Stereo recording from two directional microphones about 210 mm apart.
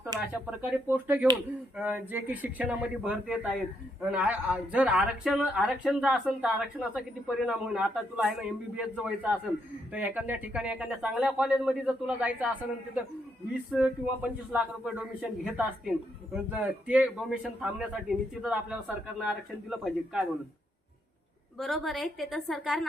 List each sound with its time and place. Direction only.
0.1 s a sound: 15° right (ahead or behind)
0.6 s a man's voice: 5° right (ahead or behind)
13.7 s a man's voice: 5° right (ahead or behind)
21.6 s a man's voice: centre (ahead or behind)